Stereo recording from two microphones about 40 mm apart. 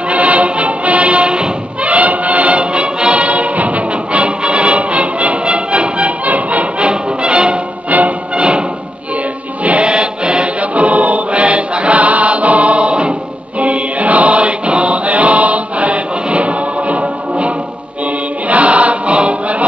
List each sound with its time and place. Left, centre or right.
0.1 s music: right
6.2 s music: right
6.9 s music: right
9.6 s choir: right
10.6 s choir: right
13.6 s music: right
18.0 s choir: right